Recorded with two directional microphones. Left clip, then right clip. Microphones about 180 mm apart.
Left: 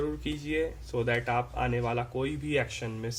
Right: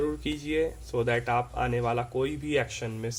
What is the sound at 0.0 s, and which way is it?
Speech, 20° right (ahead or behind).